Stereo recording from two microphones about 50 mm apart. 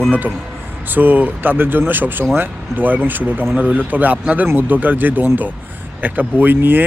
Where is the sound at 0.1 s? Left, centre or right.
Right.